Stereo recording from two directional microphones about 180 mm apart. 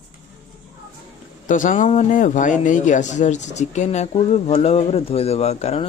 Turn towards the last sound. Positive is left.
turn(degrees=35)  # may be behind; listen again after turning